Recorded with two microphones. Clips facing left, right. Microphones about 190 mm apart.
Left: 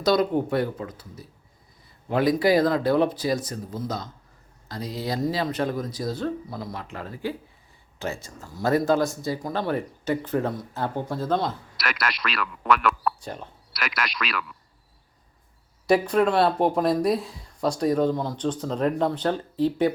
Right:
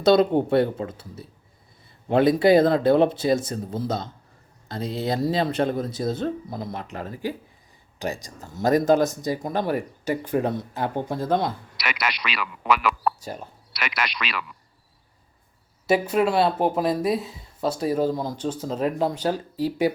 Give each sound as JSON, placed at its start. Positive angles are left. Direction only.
{"t": 0.0, "sound": "speech", "side_deg": -25}
{"t": 11.8, "sound": "speech", "side_deg": 0}
{"t": 15.9, "sound": "speech", "side_deg": -5}